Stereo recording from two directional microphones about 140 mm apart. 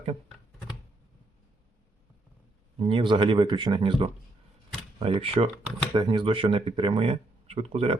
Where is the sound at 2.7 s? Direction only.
40° right (ahead or behind).